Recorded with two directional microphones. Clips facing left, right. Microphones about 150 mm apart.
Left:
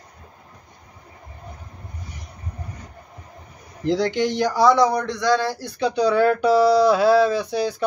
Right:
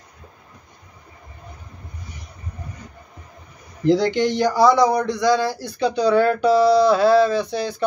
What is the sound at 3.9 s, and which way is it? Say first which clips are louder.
A man's voice: right 3 dB; centre (ahead or behind).